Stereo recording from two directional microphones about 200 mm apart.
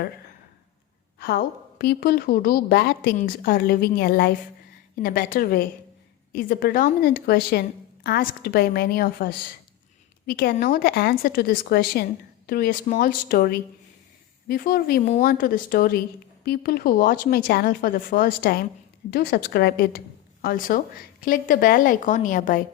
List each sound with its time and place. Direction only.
1.2 s a woman's voice: 50° left (ahead or behind)